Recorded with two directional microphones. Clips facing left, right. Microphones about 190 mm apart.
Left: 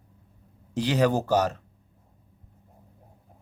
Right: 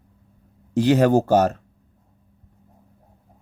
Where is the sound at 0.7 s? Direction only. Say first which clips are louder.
Right 7 dB; 50° right (ahead or behind).